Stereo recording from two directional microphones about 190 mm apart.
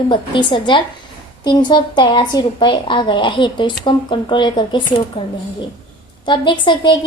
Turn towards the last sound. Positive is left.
turn(degrees=25)  # may be behind; listen again after turning